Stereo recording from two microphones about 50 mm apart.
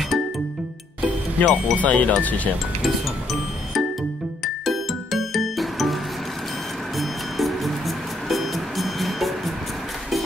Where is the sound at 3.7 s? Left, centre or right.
Centre.